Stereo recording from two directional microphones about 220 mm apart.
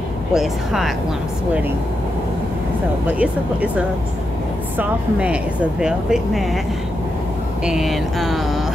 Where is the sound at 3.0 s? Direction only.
5° right (ahead or behind).